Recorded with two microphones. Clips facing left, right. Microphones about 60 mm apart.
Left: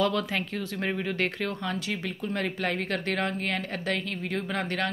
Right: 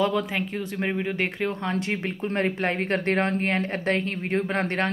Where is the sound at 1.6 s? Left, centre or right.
Right.